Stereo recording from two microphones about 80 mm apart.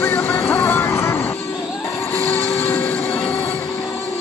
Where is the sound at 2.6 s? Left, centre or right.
Left.